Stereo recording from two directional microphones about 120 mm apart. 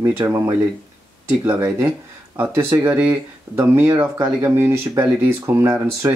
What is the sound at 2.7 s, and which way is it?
Speech, 15° right (ahead or behind).